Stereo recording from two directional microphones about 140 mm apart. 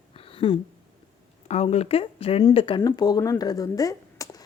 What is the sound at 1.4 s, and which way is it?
A woman's voice, 55° left (ahead or behind).